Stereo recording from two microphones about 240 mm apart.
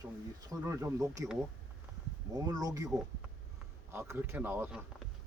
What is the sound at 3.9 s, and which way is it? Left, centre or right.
Speech, centre.